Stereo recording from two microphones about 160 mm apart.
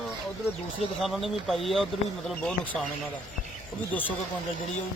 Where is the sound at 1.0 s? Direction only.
Centre (ahead or behind).